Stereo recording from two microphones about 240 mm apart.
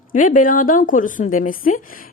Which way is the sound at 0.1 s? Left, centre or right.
Left.